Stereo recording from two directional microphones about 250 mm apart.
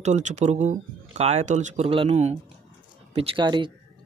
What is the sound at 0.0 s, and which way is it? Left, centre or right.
Speech, right.